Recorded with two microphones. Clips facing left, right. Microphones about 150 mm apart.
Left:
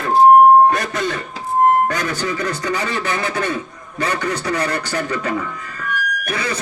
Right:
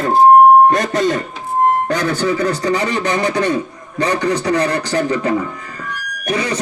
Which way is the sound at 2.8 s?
15° right (ahead or behind).